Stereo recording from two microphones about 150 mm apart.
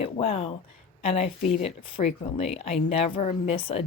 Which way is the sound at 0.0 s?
40° left (ahead or behind).